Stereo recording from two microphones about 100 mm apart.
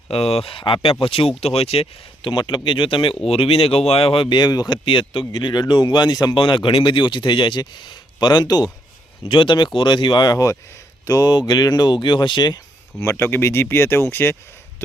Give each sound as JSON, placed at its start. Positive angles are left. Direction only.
{"t": 0.1, "sound": "speech", "side_deg": 90}
{"t": 1.4, "sound": "speech", "side_deg": 85}
{"t": 3.2, "sound": "speech", "side_deg": 70}
{"t": 5.3, "sound": "speech", "side_deg": 45}
{"t": 9.3, "sound": "speech", "side_deg": 55}
{"t": 13.0, "sound": "speech", "side_deg": 25}